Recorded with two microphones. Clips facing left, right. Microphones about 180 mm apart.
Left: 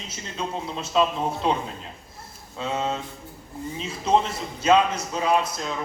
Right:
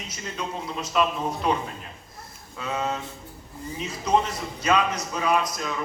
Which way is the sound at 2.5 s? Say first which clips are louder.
Left 2 dB; 25° left (ahead or behind).